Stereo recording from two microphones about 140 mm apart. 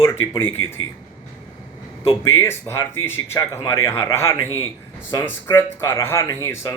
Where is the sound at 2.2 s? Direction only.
20° left (ahead or behind).